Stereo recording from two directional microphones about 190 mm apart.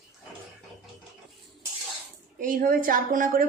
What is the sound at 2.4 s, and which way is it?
A woman's voice, 45° right (ahead or behind).